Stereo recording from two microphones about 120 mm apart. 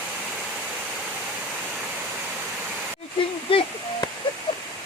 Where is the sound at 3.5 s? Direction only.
50° left (ahead or behind).